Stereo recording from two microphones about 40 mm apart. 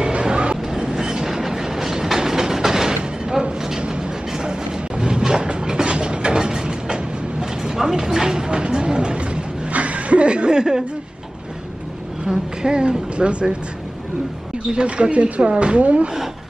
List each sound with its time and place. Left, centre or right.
0.0 s vehicle: right
0.6 s train: centre
2.9 s a sound: right
3.8 s train: right
12.3 s a sound: right
14.7 s speech: right